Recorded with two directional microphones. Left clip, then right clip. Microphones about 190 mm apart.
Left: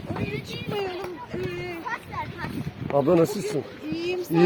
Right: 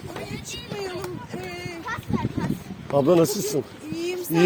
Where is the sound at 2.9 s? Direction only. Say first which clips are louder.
Right 2 dB; 40° right (ahead or behind).